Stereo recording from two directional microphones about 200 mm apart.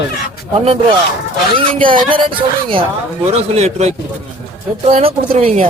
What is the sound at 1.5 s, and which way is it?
A man's voice, 25° right (ahead or behind).